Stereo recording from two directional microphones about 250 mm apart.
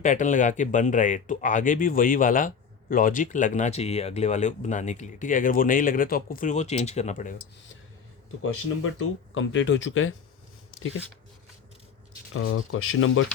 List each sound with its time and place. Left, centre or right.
0.0 s speech: left
8.4 s speech: left
12.3 s speech: left